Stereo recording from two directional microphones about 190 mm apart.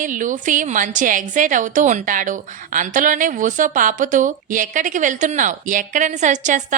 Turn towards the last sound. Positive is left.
turn(degrees=-40)  # may be behind; listen again after turning